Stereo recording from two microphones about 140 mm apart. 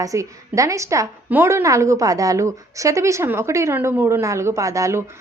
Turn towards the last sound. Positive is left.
turn(degrees=-20)  # may be behind; listen again after turning